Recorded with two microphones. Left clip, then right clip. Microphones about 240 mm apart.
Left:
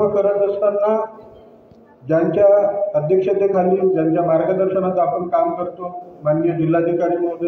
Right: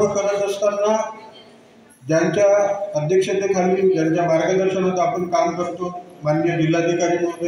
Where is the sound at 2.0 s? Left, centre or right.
Right.